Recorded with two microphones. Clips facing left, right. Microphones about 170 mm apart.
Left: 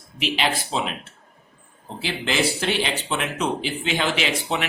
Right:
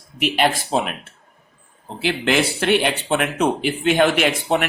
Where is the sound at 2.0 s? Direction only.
60° right (ahead or behind).